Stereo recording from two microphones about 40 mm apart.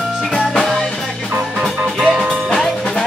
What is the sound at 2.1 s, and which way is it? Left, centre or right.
Music, right.